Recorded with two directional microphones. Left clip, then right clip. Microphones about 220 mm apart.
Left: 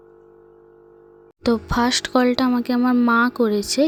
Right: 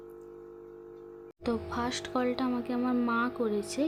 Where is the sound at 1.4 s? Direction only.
30° left (ahead or behind).